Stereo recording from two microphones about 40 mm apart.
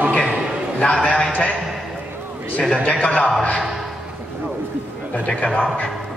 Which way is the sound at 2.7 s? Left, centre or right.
Left.